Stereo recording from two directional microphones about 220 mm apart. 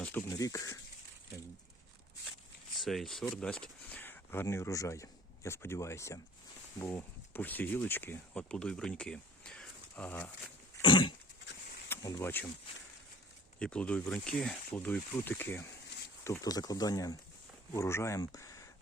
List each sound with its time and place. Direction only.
0.0 s speech: 10° left (ahead or behind)
2.8 s speech: centre (ahead or behind)
10.8 s dog: 20° left (ahead or behind)
11.9 s speech: 15° left (ahead or behind)
13.6 s speech: 5° left (ahead or behind)